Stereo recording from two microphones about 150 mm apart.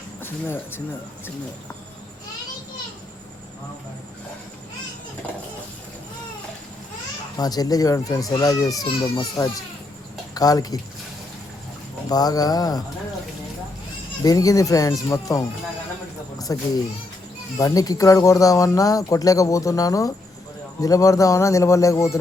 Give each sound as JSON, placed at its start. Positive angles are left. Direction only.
{"t": 0.2, "sound": "speech", "side_deg": 15}
{"t": 7.3, "sound": "speech", "side_deg": 25}
{"t": 12.0, "sound": "speech", "side_deg": 25}
{"t": 14.3, "sound": "speech", "side_deg": 25}
{"t": 16.5, "sound": "speech", "side_deg": 25}